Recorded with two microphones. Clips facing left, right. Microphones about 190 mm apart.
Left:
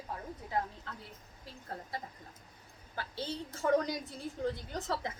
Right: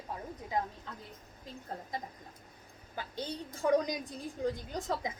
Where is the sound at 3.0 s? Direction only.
15° right (ahead or behind).